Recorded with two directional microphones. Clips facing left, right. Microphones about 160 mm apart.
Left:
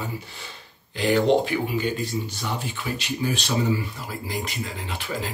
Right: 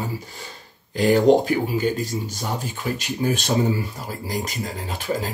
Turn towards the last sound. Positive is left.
turn(degrees=-40)  # may be behind; listen again after turning